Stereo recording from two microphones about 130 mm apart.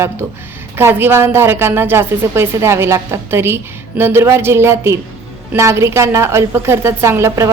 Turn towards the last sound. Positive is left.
turn(degrees=-20)  # may be behind; listen again after turning